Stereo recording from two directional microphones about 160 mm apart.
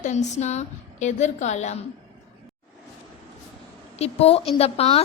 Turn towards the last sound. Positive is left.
turn(degrees=40)  # may be behind; listen again after turning